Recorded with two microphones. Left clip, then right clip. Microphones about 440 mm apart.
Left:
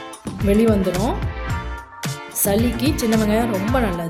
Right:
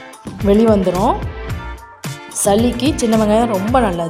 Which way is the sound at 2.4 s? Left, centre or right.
Left.